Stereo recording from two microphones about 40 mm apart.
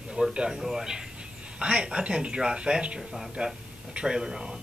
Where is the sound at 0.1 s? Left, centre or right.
Right.